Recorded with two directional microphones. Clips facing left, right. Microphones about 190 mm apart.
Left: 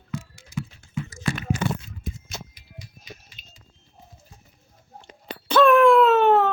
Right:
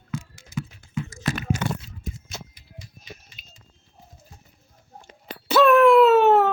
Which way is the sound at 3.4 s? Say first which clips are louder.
Even; 5° right (ahead or behind).